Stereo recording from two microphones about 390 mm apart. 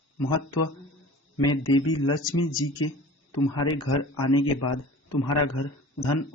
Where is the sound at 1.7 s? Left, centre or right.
Left.